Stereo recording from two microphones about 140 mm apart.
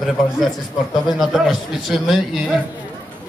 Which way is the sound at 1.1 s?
Centre (ahead or behind).